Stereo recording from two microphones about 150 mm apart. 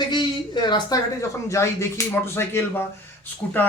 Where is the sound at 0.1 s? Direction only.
30° left (ahead or behind).